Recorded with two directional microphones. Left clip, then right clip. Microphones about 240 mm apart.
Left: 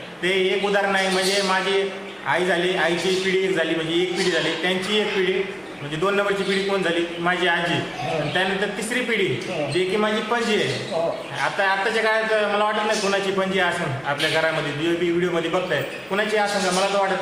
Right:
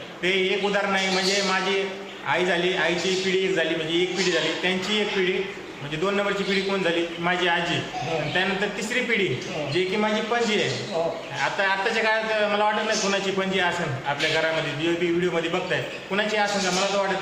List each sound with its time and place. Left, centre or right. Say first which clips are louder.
0.3 s a man's voice: left 2 dB; centre
2.3 s a man's voice: left 2 dB; centre
6.8 s a man's voice: left 2 dB; centre
11.6 s a man's voice: left 3 dB; centre
15.7 s a man's voice: left 2 dB; centre